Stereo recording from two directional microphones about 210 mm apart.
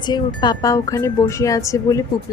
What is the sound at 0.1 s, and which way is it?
Speech, 15° left (ahead or behind).